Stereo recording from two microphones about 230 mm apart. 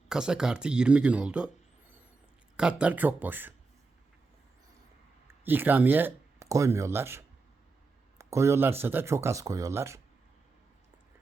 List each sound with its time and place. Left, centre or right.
0.1 s speech: centre
2.6 s speech: centre
5.3 s speech: centre